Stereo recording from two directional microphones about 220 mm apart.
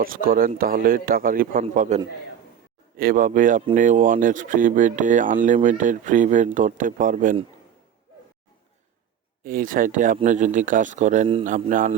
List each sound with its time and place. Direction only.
0.0 s speech: 40° right (ahead or behind)
3.0 s speech: 40° right (ahead or behind)
9.4 s speech: 40° right (ahead or behind)